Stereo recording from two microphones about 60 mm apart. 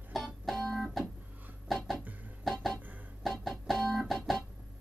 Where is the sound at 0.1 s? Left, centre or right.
Centre.